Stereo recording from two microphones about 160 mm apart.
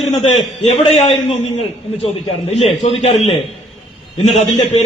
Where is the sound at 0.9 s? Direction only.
40° left (ahead or behind).